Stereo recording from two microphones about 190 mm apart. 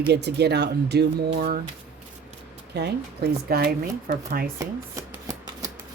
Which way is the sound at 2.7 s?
60° right (ahead or behind).